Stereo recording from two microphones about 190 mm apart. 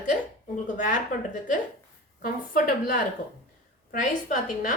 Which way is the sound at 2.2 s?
50° left (ahead or behind).